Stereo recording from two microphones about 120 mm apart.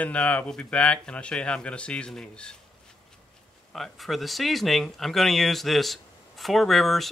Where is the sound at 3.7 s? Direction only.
Centre (ahead or behind).